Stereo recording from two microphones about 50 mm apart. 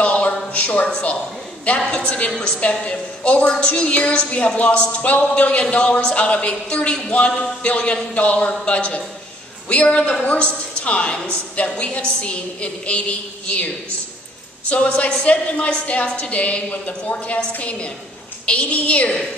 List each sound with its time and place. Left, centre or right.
0.0 s a sound: left
0.8 s a man's voice: centre
14.7 s a woman's voice: left